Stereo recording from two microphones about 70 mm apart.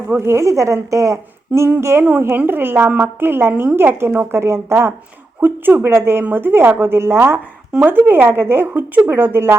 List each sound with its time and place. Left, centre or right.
0.1 s a woman's voice: right
2.3 s a woman's voice: right
5.4 s speech: right
7.8 s speech: right